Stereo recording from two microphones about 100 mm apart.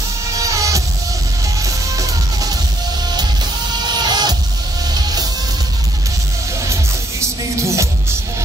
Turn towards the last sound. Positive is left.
turn(degrees=-30)  # may be behind; listen again after turning